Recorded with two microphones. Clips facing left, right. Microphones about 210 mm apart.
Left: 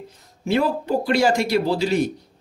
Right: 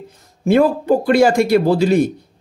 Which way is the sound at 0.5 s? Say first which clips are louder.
Right 7 dB; 50° right (ahead or behind).